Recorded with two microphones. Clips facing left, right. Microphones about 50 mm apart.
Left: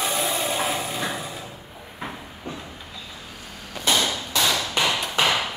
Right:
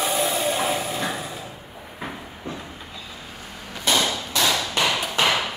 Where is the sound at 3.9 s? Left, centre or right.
Centre.